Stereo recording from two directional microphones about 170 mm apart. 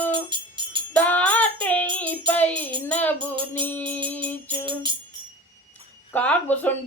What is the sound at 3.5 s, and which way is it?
Mantra, 10° left (ahead or behind).